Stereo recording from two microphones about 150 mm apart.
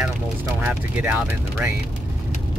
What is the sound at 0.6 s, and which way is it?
Speech, 10° right (ahead or behind).